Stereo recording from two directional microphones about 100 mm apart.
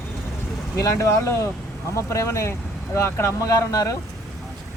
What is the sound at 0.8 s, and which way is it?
Speech, 30° left (ahead or behind).